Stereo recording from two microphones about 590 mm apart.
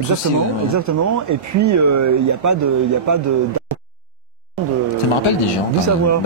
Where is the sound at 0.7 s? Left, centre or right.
Right.